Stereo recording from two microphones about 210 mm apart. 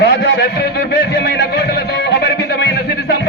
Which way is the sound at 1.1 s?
50° left (ahead or behind).